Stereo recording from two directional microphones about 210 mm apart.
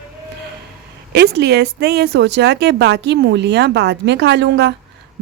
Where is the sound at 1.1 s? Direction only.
50° right (ahead or behind).